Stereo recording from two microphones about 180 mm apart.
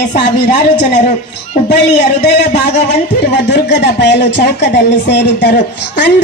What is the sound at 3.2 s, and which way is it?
Speech, 70° left (ahead or behind).